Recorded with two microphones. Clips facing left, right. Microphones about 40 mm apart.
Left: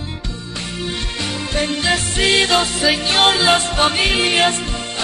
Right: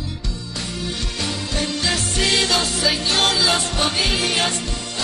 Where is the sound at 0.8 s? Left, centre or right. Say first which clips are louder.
Left 3 dB; left.